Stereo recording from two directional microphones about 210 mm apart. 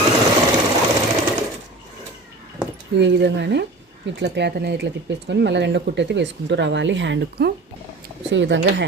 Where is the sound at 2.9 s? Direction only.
55° right (ahead or behind).